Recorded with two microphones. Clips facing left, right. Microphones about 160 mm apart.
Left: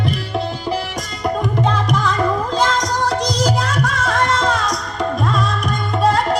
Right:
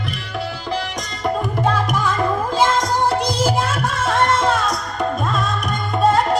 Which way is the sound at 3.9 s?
25° right (ahead or behind).